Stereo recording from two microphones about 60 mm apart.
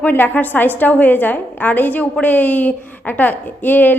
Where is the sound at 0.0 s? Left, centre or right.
Left.